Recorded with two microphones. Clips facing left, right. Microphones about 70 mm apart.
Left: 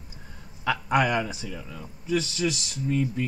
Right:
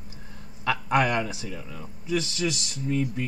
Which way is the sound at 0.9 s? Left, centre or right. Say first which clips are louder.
Even; right.